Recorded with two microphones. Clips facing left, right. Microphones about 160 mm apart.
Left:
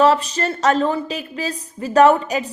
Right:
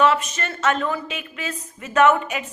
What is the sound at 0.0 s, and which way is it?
A woman's voice, 35° left (ahead or behind).